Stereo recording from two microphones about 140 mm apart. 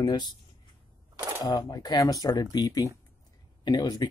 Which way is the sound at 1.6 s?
25° left (ahead or behind).